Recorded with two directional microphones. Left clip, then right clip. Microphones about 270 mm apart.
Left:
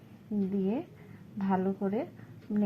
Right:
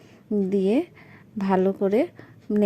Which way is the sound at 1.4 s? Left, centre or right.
Right.